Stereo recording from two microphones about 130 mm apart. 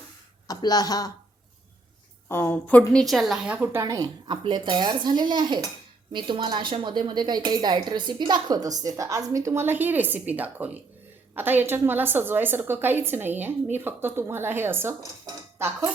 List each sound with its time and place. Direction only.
0.4 s speech: 30° left (ahead or behind)
2.3 s a woman's voice: 15° left (ahead or behind); by 15.9 s 20° right (ahead or behind)